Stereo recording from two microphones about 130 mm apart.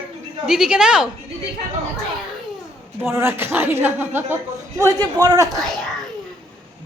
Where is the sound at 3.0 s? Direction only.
20° right (ahead or behind).